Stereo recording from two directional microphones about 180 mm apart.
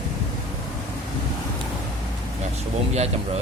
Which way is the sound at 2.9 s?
35° right (ahead or behind).